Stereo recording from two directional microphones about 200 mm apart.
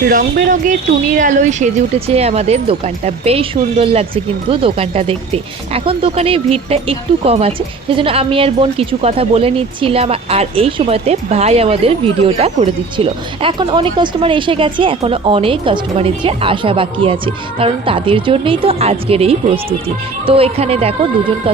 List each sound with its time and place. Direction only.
0.0 s speech: 45° right (ahead or behind); by 21.5 s 30° right (ahead or behind)